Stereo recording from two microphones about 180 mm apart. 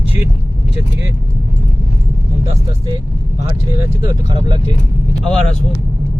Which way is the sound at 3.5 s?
15° right (ahead or behind).